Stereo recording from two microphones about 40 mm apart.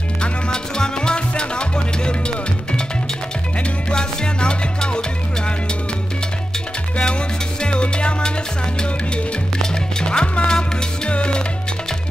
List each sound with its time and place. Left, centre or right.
0.2 s music: centre
3.9 s music: left
7.6 s music: left
9.6 s music: centre